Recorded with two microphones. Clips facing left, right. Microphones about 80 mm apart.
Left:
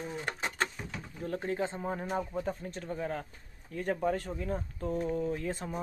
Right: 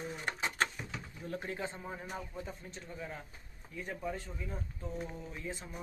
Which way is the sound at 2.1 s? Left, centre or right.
Left.